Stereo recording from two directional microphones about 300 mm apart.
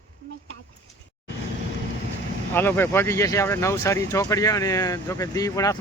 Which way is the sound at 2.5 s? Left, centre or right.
Centre.